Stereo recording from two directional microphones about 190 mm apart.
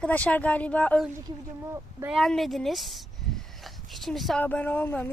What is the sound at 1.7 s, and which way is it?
Speech, 10° right (ahead or behind).